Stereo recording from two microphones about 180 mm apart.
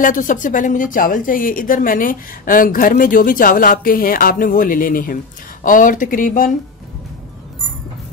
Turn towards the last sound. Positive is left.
turn(degrees=50)  # may be behind; listen again after turning